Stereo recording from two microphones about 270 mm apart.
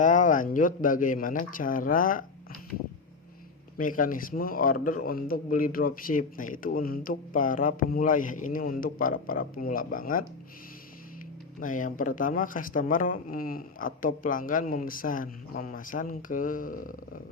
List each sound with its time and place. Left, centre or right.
0.0 s a man's voice: left
3.8 s a man's voice: left
11.6 s a man's voice: left